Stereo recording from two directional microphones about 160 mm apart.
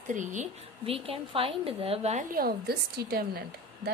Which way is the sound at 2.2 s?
70° right (ahead or behind).